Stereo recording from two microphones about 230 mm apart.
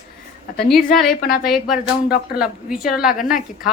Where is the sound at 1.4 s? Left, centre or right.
Centre.